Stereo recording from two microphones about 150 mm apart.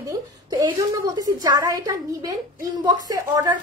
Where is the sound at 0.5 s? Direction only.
25° right (ahead or behind).